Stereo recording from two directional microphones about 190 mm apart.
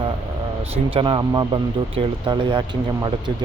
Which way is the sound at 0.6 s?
30° right (ahead or behind).